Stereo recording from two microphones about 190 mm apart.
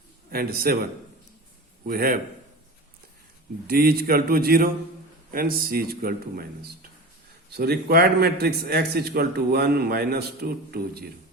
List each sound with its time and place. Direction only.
0.3 s a man's voice: 50° right (ahead or behind)
1.9 s a man's voice: 50° right (ahead or behind)
3.7 s a man's voice: 50° right (ahead or behind)